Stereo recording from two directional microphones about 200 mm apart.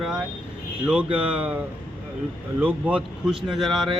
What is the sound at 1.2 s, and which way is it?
Speech, 5° right (ahead or behind).